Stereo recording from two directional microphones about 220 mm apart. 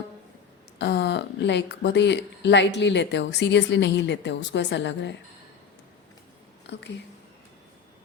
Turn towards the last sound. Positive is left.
turn(degrees=55)  # may be behind; listen again after turning